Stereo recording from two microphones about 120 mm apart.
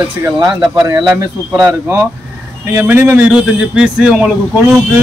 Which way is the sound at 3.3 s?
10° right (ahead or behind).